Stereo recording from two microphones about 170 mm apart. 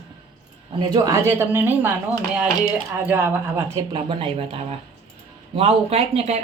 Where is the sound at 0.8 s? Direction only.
20° right (ahead or behind).